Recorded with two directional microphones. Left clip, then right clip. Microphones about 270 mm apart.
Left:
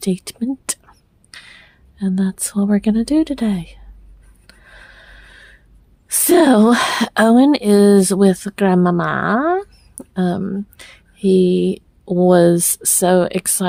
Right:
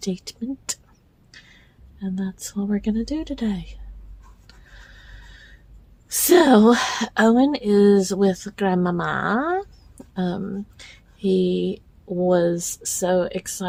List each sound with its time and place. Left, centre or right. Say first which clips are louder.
0.0 s speech: left 7 dB; left
4.4 s rub: left 7 dB; left
6.1 s speech: left 3 dB; left